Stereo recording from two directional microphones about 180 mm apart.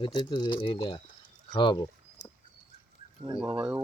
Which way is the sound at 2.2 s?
40° left (ahead or behind).